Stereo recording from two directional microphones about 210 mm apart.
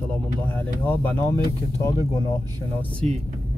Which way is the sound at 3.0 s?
30° right (ahead or behind).